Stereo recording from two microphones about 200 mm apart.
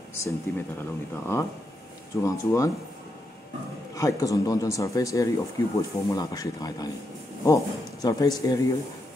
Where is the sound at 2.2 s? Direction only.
15° left (ahead or behind).